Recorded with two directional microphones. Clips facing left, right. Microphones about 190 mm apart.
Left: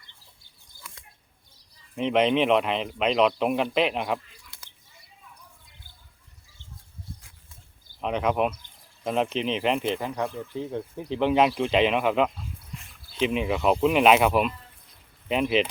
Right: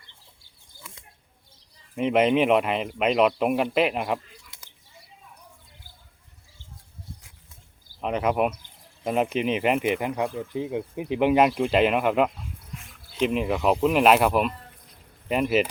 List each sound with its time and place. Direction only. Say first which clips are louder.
0.8 s a sound: right 2 dB; 25° right (ahead or behind)
2.0 s speech: right 2 dB; 5° right (ahead or behind)
8.0 s speech: right 1 dB; 5° right (ahead or behind)